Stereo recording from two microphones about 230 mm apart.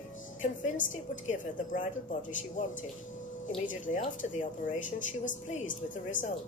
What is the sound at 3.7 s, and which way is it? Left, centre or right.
A woman's voice, left.